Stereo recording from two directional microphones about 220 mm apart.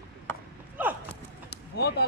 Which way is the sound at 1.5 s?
50° left (ahead or behind).